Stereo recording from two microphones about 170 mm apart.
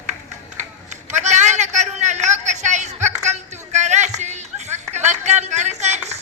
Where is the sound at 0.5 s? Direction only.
45° right (ahead or behind).